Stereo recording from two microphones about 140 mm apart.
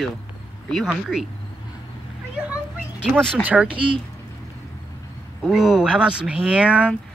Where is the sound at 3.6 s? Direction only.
35° right (ahead or behind).